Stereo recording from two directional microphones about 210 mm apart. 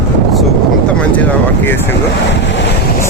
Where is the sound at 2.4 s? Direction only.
55° left (ahead or behind).